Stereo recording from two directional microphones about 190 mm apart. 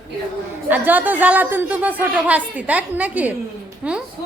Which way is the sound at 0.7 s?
10° right (ahead or behind).